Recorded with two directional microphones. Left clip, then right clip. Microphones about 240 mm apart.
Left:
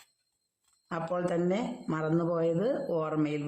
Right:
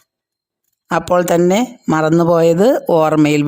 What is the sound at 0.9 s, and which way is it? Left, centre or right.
Speech, right.